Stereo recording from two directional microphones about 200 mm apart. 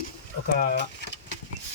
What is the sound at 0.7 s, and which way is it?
Speech, 60° left (ahead or behind).